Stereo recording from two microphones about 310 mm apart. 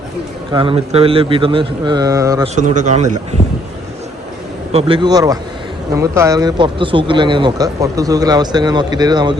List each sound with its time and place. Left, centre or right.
0.5 s speech: centre
2.6 s a man's voice: right
4.7 s speech: centre